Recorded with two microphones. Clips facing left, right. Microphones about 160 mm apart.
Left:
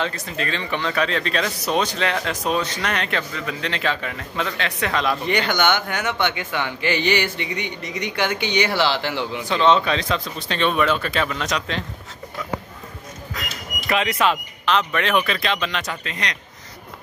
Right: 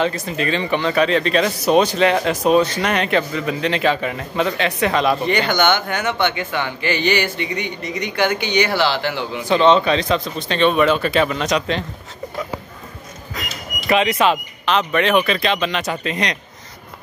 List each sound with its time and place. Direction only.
0.0 s a man's voice: 10° right (ahead or behind)
5.5 s a man's voice: 10° left (ahead or behind)
9.7 s speech: centre (ahead or behind)
13.8 s speech: centre (ahead or behind)
15.8 s a man's voice: 20° right (ahead or behind)